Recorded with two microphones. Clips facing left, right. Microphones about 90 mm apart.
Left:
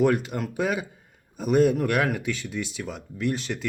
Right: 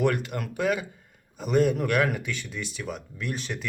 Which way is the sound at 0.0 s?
15° left (ahead or behind).